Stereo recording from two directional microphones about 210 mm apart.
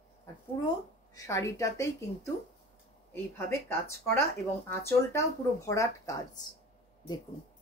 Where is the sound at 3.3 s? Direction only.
10° left (ahead or behind).